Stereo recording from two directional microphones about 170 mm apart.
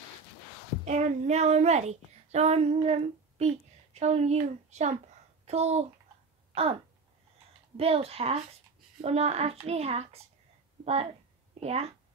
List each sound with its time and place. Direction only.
0.8 s a child's voice: 40° right (ahead or behind)
6.5 s a sound: 35° right (ahead or behind)
7.7 s a child's voice: 35° right (ahead or behind)